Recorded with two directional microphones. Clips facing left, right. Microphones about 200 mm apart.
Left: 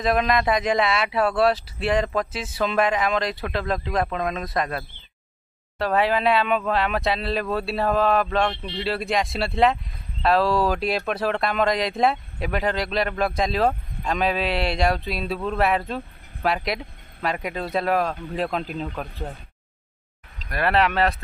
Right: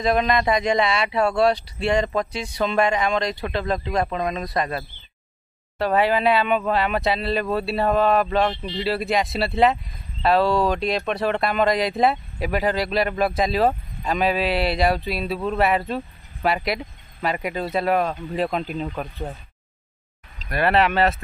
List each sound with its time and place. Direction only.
0.0 s speech: centre (ahead or behind)
20.4 s speech: centre (ahead or behind)